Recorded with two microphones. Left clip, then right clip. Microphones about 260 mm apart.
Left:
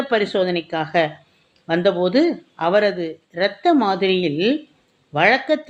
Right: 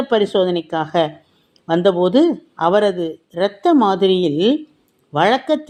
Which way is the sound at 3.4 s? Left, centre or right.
Centre.